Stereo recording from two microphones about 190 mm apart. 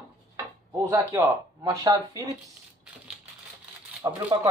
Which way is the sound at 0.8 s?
15° right (ahead or behind).